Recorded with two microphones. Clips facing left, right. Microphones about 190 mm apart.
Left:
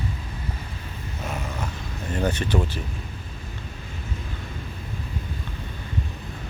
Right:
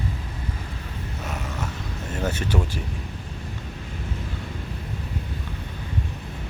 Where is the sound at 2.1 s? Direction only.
5° right (ahead or behind).